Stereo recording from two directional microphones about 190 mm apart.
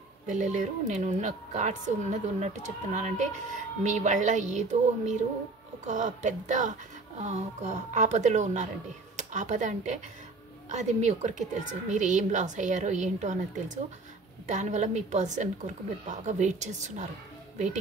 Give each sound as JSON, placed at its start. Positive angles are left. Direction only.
{"t": 0.3, "sound": "a woman's voice", "side_deg": -40}